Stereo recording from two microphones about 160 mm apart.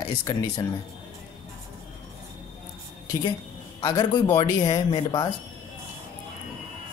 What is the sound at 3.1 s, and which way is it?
Speech, 25° left (ahead or behind).